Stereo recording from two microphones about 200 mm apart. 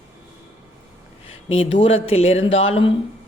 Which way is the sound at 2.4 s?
75° left (ahead or behind).